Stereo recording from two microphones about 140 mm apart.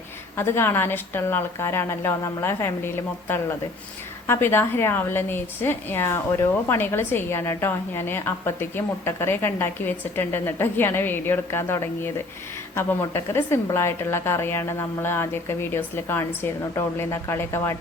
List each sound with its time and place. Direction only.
0.3 s a woman's voice: 15° left (ahead or behind)